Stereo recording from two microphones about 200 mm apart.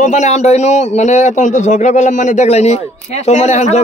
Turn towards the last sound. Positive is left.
turn(degrees=35)  # may be behind; listen again after turning